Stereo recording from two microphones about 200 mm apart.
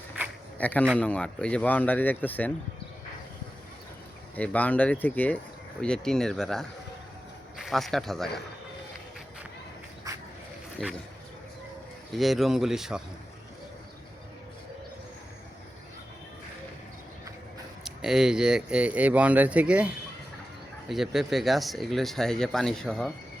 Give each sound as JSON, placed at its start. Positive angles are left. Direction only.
{"t": 0.6, "sound": "speech", "side_deg": 5}
{"t": 4.4, "sound": "speech", "side_deg": 5}
{"t": 10.1, "sound": "a sound", "side_deg": -15}
{"t": 10.8, "sound": "speech", "side_deg": 5}
{"t": 12.1, "sound": "speech", "side_deg": 0}
{"t": 17.8, "sound": "speech", "side_deg": 0}